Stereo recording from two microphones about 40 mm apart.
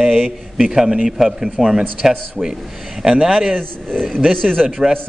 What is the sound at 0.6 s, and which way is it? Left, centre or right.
Speech, centre.